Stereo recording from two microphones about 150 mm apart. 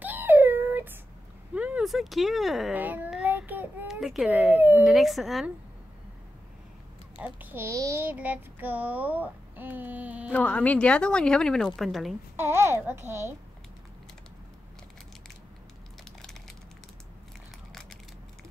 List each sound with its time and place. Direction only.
0.0 s a sound: 15° right (ahead or behind)
1.5 s speech: 10° right (ahead or behind)
2.7 s child singing: 10° right (ahead or behind)
4.6 s a child's voice: 10° right (ahead or behind)
4.8 s a woman's voice: centre (ahead or behind)
7.2 s a child's voice: 10° right (ahead or behind)
10.3 s a woman's voice: 10° left (ahead or behind)
12.4 s a child's voice: 15° right (ahead or behind)
16.0 s crushing: 5° left (ahead or behind)